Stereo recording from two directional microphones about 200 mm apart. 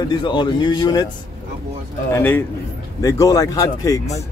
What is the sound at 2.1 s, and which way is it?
Speech, 10° left (ahead or behind).